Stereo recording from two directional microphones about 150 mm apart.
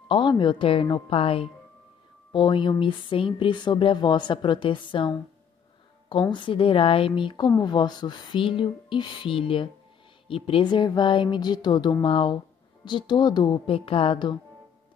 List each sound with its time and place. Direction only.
0.1 s a woman's voice: 30° left (ahead or behind)